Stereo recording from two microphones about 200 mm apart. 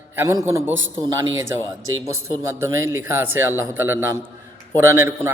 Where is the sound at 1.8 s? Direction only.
90° right.